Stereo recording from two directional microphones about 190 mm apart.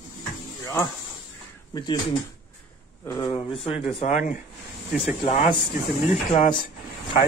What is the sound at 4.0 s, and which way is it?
Speech, 40° left (ahead or behind).